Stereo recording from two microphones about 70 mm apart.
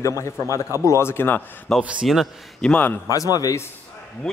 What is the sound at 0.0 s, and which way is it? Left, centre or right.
Speech, left.